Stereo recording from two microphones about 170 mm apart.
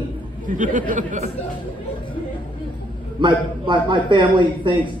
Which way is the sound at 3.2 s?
30° right (ahead or behind).